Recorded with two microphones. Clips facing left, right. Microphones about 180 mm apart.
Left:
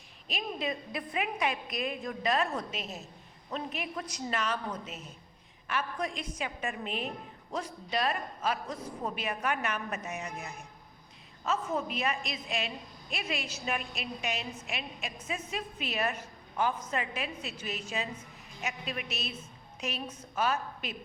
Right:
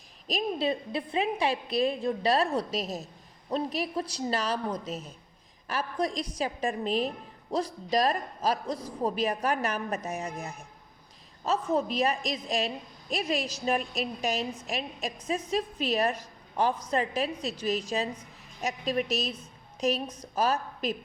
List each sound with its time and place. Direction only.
0.3 s a woman's voice: 35° right (ahead or behind)